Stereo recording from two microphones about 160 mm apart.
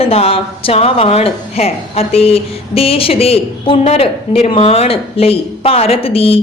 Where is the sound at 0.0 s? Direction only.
40° left (ahead or behind).